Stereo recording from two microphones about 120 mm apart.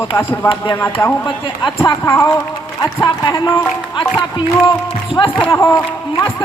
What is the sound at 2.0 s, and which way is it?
Speech, 20° left (ahead or behind).